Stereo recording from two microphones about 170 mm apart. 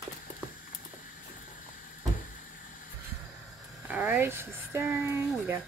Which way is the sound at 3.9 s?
10° right (ahead or behind).